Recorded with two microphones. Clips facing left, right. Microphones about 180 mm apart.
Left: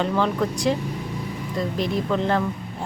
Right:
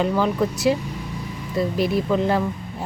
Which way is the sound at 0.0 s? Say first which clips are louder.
Right 2 dB; 5° right (ahead or behind).